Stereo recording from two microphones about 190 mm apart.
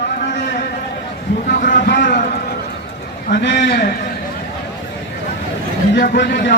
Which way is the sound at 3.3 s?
65° left (ahead or behind).